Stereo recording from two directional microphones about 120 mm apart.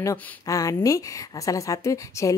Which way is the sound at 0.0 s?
25° left (ahead or behind).